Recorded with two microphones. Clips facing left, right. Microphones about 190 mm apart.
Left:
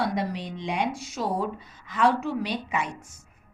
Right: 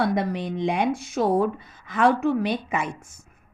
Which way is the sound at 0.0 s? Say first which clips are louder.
Right 4 dB; 55° right (ahead or behind).